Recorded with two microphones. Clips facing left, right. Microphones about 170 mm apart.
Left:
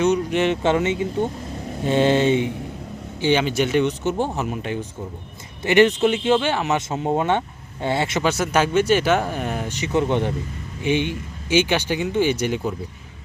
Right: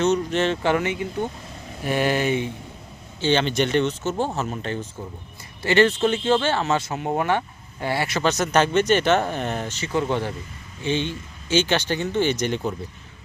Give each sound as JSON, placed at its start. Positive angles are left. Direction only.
{"t": 0.0, "sound": "speech", "side_deg": 10}
{"t": 3.2, "sound": "speech", "side_deg": 10}
{"t": 8.2, "sound": "speech", "side_deg": 10}